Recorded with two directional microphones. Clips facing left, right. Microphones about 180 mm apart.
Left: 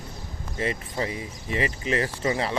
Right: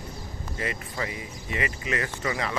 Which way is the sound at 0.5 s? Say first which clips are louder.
Left 4 dB; 30° left (ahead or behind).